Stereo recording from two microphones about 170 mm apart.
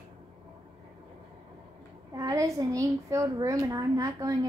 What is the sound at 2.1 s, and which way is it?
A woman's voice, 20° right (ahead or behind).